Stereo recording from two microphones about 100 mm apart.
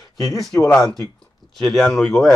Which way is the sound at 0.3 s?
Centre (ahead or behind).